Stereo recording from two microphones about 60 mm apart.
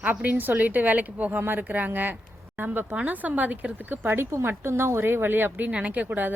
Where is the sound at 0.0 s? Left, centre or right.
Right.